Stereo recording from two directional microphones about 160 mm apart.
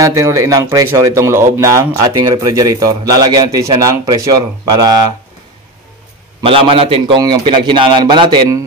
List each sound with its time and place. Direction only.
0.0 s speech: 20° right (ahead or behind)
6.4 s a man's voice: 35° right (ahead or behind)
7.2 s speech: 25° right (ahead or behind)